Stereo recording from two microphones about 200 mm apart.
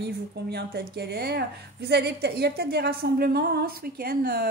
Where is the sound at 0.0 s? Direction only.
55° right (ahead or behind).